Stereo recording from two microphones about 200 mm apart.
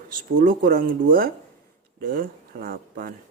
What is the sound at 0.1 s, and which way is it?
Speech, 45° right (ahead or behind).